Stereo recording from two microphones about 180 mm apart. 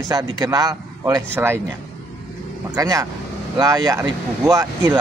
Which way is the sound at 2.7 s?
20° right (ahead or behind).